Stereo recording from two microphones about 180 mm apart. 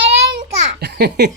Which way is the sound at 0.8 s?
65° right (ahead or behind).